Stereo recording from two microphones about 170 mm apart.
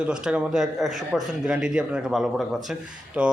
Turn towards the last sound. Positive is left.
turn(degrees=-5)  # may be behind; listen again after turning